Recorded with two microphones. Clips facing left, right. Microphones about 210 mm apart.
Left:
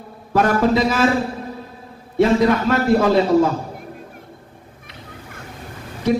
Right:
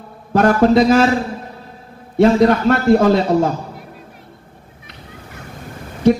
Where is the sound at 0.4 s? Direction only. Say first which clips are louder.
Right 4 dB; 45° right (ahead or behind).